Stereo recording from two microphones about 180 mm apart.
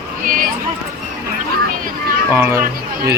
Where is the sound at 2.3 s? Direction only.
15° right (ahead or behind).